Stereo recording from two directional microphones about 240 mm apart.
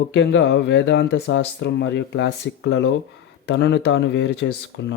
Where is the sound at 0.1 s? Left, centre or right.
Left.